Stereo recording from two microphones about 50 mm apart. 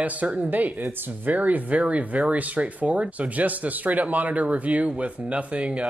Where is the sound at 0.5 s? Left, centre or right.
Right.